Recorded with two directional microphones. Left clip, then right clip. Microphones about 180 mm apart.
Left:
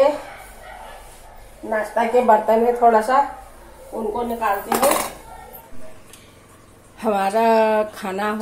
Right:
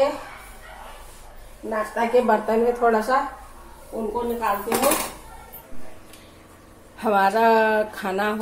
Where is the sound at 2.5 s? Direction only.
40° right (ahead or behind).